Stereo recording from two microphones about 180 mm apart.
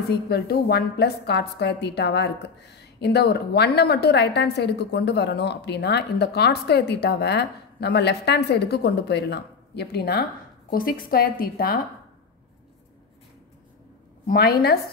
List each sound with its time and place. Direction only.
0.3 s a woman's voice: 65° left (ahead or behind)
10.7 s a woman's voice: 55° left (ahead or behind)
14.2 s a woman's voice: 55° left (ahead or behind)